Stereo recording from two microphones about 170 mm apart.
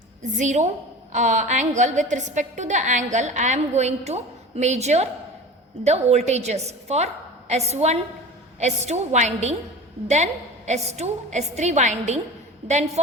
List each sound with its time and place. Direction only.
0.3 s a woman's voice: 45° right (ahead or behind)
10.7 s a woman's voice: 40° right (ahead or behind)